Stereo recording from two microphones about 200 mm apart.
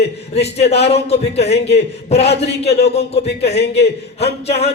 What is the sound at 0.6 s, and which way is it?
Speech, 30° left (ahead or behind).